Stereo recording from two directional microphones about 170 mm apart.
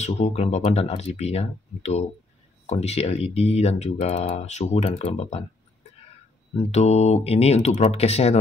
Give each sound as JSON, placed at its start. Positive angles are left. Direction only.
{"t": 0.0, "sound": "speech", "side_deg": 40}
{"t": 6.5, "sound": "speech", "side_deg": 35}